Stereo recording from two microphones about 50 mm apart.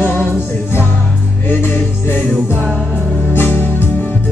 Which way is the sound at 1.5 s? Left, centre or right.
Left.